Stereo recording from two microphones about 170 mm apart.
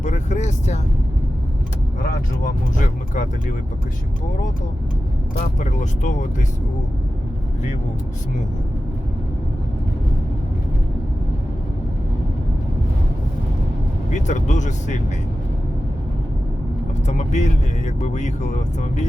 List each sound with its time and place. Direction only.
0.0 s vehicle: 45° left (ahead or behind)
2.0 s speech: 55° left (ahead or behind)
5.3 s speech: 50° left (ahead or behind)
14.1 s speech: 45° left (ahead or behind)
17.1 s speech: 45° left (ahead or behind)